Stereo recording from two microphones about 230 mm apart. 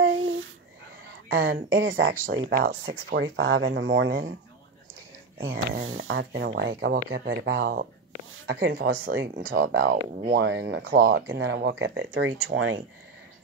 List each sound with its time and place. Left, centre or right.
0.0 s a sound: right
1.3 s speech: right
2.5 s speech: right
2.8 s speech: right
5.4 s speech: right